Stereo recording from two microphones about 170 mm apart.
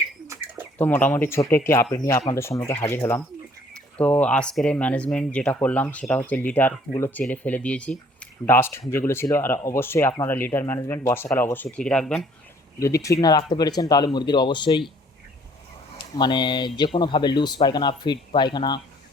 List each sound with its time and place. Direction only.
0.8 s speech: 10° left (ahead or behind)
12.8 s speech: 20° left (ahead or behind)
16.0 s speech: 25° left (ahead or behind)